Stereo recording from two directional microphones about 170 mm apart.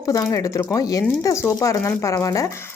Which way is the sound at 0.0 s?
20° left (ahead or behind).